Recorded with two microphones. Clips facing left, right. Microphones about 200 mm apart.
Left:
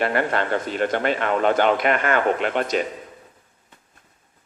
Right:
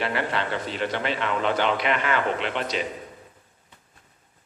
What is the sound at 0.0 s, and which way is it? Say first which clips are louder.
A man's voice: left 5 dB; 50° left (ahead or behind).